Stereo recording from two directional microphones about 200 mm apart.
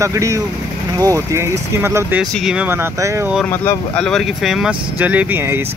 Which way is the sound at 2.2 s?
Centre (ahead or behind).